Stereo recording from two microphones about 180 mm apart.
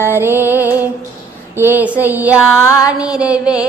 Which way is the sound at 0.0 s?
10° right (ahead or behind).